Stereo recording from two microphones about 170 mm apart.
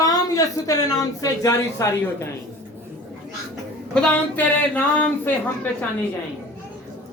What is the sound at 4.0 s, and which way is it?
Speech, 10° left (ahead or behind).